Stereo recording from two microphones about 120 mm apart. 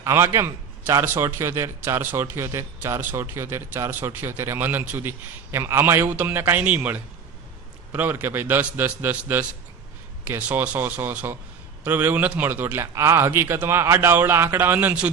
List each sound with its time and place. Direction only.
0.0 s a man's voice: 25° right (ahead or behind)